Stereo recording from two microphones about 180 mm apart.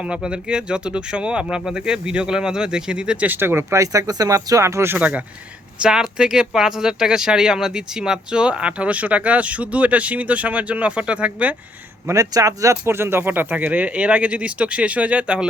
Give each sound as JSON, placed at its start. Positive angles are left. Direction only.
{"t": 0.0, "sound": "speech", "side_deg": -5}
{"t": 12.0, "sound": "speech", "side_deg": -20}